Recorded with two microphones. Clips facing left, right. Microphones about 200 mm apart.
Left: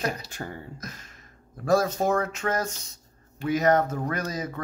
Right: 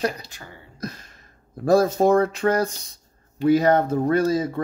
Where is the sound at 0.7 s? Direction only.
35° right (ahead or behind).